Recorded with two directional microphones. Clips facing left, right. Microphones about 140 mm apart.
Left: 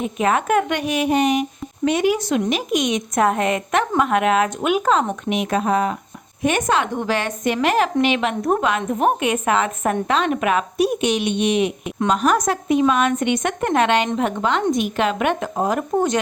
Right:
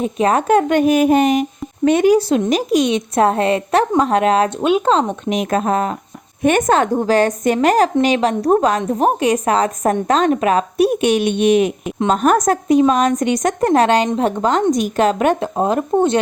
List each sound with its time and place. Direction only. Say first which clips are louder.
0.0 s a woman's voice: right 4 dB; 35° right (ahead or behind)
0.8 s speech: right 7 dB; 45° right (ahead or behind)
2.1 s a woman's voice: right 6 dB; 30° right (ahead or behind)
10.8 s a woman's voice: right 5 dB; 55° right (ahead or behind); by 15.4 s 40° right (ahead or behind)
15.5 s speech: right 4 dB; 25° right (ahead or behind)